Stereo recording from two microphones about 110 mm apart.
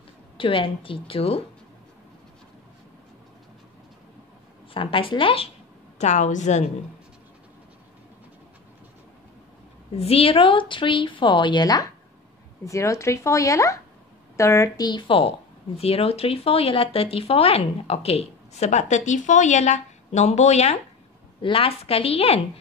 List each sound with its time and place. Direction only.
0.4 s a woman's voice: 55° left (ahead or behind)
4.7 s a woman's voice: 55° left (ahead or behind)
5.9 s a woman's voice: 90° left
9.9 s a woman's voice: 65° left (ahead or behind); by 14.9 s 30° left (ahead or behind)
14.9 s a woman's voice: 50° left (ahead or behind)
15.8 s speech: 65° left (ahead or behind)
21.4 s a woman's voice: 55° left (ahead or behind)